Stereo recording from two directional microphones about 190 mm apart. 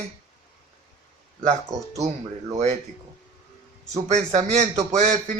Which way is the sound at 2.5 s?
35° right (ahead or behind).